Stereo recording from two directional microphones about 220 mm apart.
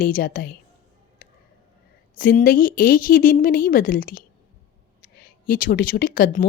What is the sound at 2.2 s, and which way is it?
Speech, 40° left (ahead or behind).